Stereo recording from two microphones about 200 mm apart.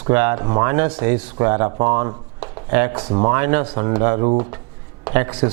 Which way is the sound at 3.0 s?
30° right (ahead or behind).